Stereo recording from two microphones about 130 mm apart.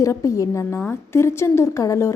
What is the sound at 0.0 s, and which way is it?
A woman's voice, 25° left (ahead or behind).